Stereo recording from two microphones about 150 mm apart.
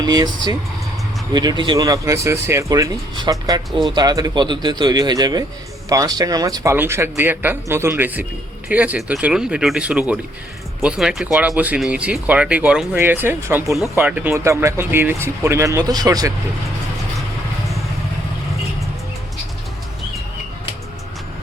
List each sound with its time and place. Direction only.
0.0 s speech: 25° right (ahead or behind)
3.7 s speech: centre (ahead or behind)
3.9 s speech: 25° right (ahead or behind)